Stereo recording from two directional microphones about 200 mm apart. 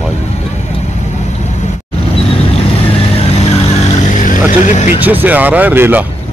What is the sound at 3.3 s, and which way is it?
Vehicle, 30° left (ahead or behind).